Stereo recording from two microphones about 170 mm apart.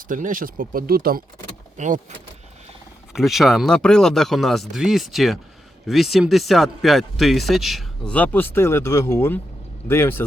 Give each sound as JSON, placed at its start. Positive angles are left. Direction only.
{"t": 0.1, "sound": "speech", "side_deg": -55}
{"t": 1.8, "sound": "speech", "side_deg": -45}
{"t": 3.1, "sound": "speech", "side_deg": 0}